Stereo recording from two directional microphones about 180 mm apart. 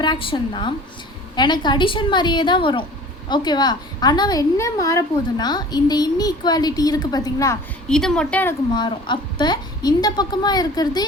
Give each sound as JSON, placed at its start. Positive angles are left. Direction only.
{"t": 0.0, "sound": "a woman's voice", "side_deg": 25}
{"t": 7.9, "sound": "a woman's voice", "side_deg": 5}
{"t": 8.7, "sound": "a woman's voice", "side_deg": 25}